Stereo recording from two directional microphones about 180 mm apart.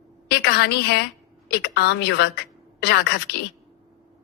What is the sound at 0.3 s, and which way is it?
A woman's voice, 65° left (ahead or behind).